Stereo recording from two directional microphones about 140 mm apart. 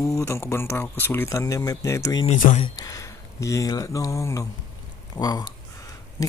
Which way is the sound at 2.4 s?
60° left (ahead or behind).